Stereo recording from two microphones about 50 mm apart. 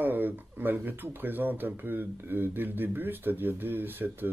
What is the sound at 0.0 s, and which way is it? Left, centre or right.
Speech, right.